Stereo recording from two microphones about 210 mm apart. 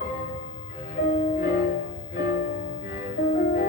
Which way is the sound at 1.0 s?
40° left (ahead or behind).